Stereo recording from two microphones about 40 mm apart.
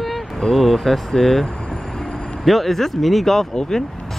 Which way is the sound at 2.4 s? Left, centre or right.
Centre.